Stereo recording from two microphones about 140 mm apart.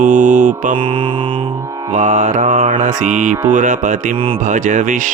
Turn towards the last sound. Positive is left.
turn(degrees=-65)  # may be behind; listen again after turning